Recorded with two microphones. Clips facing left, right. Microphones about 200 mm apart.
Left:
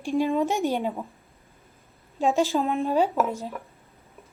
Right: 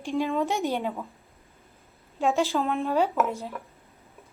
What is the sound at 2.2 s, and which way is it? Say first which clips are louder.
A woman's voice: left 2 dB; 15° left (ahead or behind).